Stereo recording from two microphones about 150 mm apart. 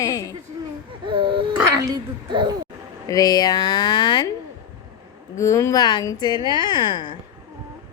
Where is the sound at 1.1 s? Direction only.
35° right (ahead or behind).